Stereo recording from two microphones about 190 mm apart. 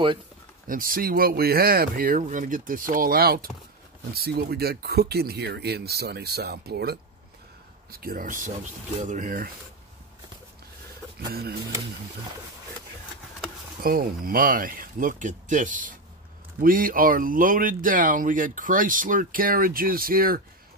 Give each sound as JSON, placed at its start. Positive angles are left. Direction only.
{"t": 0.7, "sound": "speech", "side_deg": -45}
{"t": 8.0, "sound": "speech", "side_deg": -50}
{"t": 13.8, "sound": "speech", "side_deg": -50}